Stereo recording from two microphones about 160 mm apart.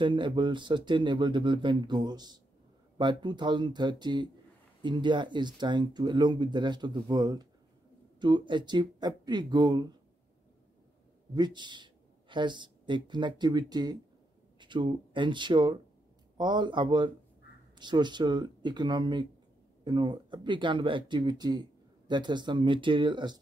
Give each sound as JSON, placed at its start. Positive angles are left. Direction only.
{"t": 0.0, "sound": "speech", "side_deg": -30}
{"t": 11.3, "sound": "speech", "side_deg": -25}